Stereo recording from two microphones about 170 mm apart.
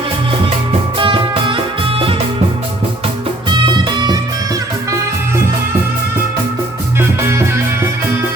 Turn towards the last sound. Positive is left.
turn(degrees=-15)  # may be behind; listen again after turning